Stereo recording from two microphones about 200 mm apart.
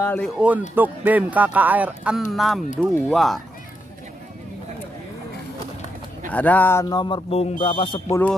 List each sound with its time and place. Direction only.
0.0 s speech: 10° left (ahead or behind)
0.4 s speech: 10° right (ahead or behind)
6.3 s speech: 10° left (ahead or behind); by 8.0 s 25° left (ahead or behind)
8.1 s speech: 10° left (ahead or behind)